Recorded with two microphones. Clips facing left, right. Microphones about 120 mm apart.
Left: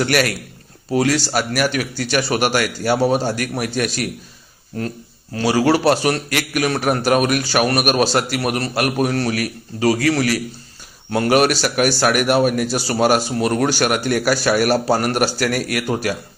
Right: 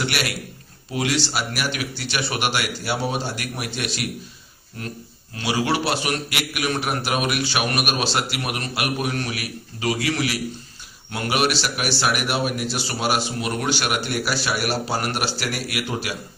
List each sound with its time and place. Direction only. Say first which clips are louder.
0.0 s a man's voice: left 8 dB; 45° left (ahead or behind)
5.3 s a man's voice: left 7 dB; 40° left (ahead or behind)